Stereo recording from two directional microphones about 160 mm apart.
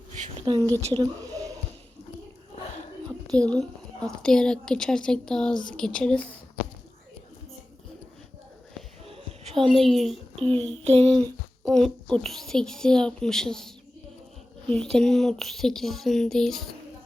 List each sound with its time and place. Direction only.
0.4 s a woman's voice: 30° right (ahead or behind)
0.9 s a sound: 20° right (ahead or behind)
3.1 s a woman's voice: 5° left (ahead or behind)
9.0 s music: 35° right (ahead or behind)
9.7 s a woman's voice: centre (ahead or behind)
10.4 s child singing: 35° right (ahead or behind)
11.7 s a woman's voice: 5° left (ahead or behind)